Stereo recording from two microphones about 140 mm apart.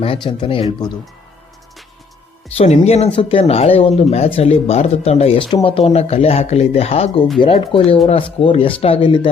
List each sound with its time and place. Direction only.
0.0 s speech: 40° left (ahead or behind)
2.6 s speech: 50° left (ahead or behind)